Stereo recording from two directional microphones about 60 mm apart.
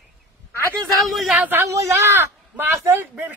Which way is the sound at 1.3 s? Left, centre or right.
Right.